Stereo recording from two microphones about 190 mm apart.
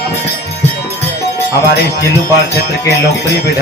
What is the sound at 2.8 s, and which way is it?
Jingle bell, 15° left (ahead or behind).